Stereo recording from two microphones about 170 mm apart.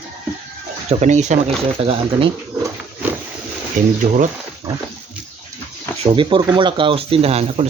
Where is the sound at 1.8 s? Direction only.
35° right (ahead or behind).